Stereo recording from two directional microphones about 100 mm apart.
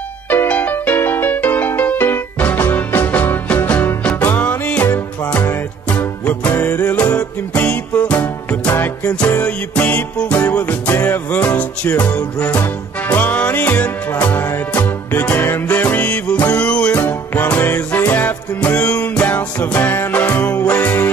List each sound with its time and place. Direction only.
0.3 s music: 15° left (ahead or behind)